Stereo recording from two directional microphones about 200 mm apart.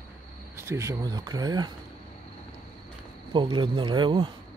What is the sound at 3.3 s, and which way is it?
Speech, 25° right (ahead or behind).